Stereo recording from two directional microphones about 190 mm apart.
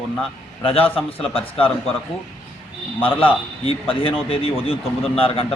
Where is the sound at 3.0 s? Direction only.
30° left (ahead or behind).